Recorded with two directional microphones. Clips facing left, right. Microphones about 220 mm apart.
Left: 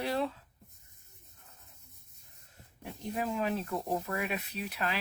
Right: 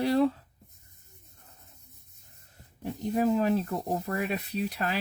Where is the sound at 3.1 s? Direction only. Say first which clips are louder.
Right 8 dB; 40° right (ahead or behind).